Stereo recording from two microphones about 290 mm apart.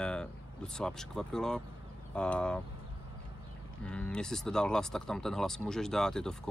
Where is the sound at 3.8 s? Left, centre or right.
Centre.